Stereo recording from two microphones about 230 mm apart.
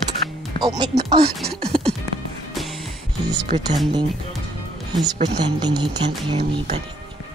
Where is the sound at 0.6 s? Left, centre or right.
Centre.